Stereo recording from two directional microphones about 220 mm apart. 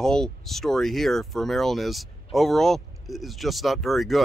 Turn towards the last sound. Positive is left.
turn(degrees=0)  # may be behind; listen again after turning